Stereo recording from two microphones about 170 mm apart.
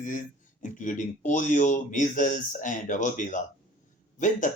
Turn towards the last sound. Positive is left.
turn(degrees=50)  # may be behind; listen again after turning